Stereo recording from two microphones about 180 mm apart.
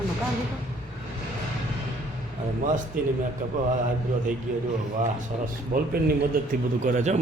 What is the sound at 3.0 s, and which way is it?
Speech, 50° right (ahead or behind).